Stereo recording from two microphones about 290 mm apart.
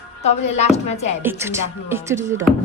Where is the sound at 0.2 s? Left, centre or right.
Left.